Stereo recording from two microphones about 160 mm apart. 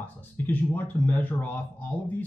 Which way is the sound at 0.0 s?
10° left (ahead or behind).